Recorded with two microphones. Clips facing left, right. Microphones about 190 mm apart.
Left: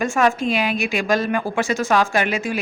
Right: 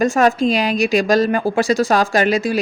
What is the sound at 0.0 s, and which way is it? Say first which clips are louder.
A woman's voice: right 4 dB; 35° right (ahead or behind).